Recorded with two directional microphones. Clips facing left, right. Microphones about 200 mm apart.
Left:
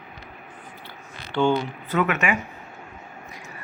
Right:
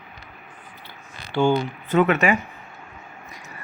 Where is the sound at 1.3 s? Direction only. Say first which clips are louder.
Right 1 dB; 10° right (ahead or behind).